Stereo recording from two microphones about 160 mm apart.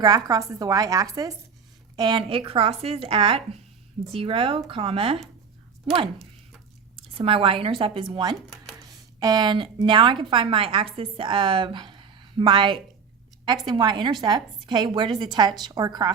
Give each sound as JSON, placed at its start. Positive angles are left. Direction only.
{"t": 0.0, "sound": "a woman's voice", "side_deg": -25}
{"t": 8.4, "sound": "speech", "side_deg": 0}
{"t": 9.2, "sound": "a woman's voice", "side_deg": -25}